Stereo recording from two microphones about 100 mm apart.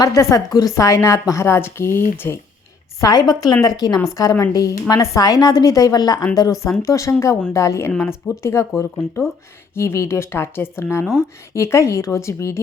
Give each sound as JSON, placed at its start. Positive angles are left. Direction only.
{"t": 0.0, "sound": "a woman's voice", "side_deg": 30}
{"t": 3.0, "sound": "a woman's voice", "side_deg": 40}